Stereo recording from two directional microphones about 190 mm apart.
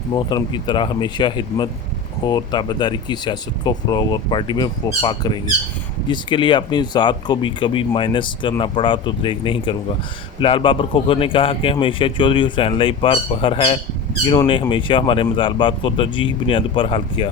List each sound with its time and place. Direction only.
0.1 s speech: 25° left (ahead or behind)